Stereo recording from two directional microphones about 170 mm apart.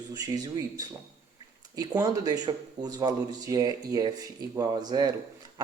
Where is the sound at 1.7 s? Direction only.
20° right (ahead or behind).